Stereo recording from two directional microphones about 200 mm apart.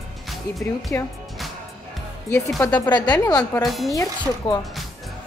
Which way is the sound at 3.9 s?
15° left (ahead or behind).